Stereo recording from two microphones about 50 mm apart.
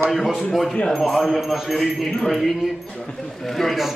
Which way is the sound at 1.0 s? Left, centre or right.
Centre.